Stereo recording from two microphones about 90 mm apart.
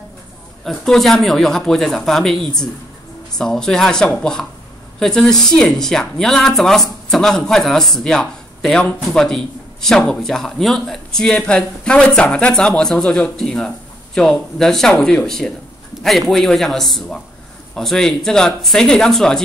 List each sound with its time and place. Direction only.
0.7 s speech: 5° left (ahead or behind)